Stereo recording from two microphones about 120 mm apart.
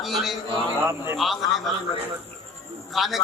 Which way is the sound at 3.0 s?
Centre (ahead or behind).